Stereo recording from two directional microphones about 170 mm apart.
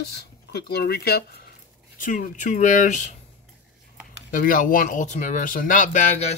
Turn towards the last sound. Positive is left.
turn(degrees=40)  # may be behind; listen again after turning